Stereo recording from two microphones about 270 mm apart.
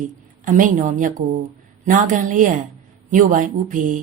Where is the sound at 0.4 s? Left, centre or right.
Right.